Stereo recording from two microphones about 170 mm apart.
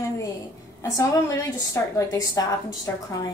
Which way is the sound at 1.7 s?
20° left (ahead or behind).